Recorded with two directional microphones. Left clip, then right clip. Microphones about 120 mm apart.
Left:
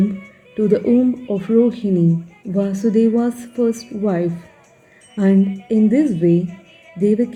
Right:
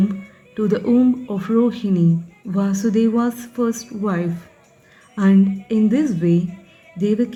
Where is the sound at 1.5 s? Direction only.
10° left (ahead or behind).